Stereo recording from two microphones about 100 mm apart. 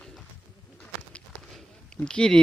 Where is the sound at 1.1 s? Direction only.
10° left (ahead or behind).